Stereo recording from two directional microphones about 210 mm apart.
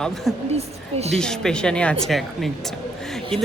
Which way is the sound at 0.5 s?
30° right (ahead or behind).